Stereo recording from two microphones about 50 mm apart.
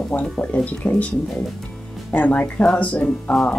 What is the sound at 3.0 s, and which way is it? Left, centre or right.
Speech, centre.